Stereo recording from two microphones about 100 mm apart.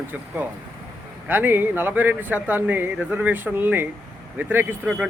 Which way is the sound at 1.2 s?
20° right (ahead or behind).